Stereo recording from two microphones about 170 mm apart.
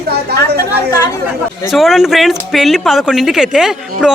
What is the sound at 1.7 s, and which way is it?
Speech, centre (ahead or behind).